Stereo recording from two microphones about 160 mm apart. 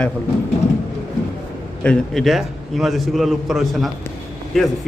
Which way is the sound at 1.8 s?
5° left (ahead or behind).